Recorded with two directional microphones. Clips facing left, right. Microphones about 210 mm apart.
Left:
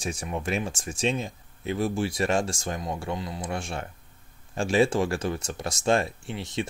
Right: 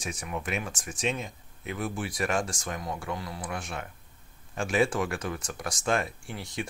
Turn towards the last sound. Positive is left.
turn(degrees=25)  # may be behind; listen again after turning